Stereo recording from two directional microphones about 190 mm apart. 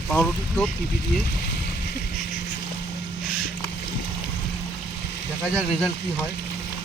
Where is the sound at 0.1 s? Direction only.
5° left (ahead or behind).